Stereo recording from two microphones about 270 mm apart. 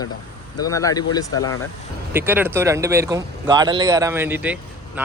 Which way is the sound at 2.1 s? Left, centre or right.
Centre.